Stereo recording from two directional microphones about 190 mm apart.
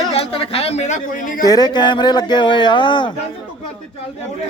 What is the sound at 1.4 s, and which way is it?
Speech, 20° left (ahead or behind).